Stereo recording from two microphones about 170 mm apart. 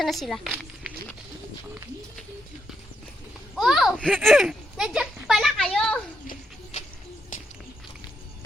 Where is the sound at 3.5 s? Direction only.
Centre (ahead or behind).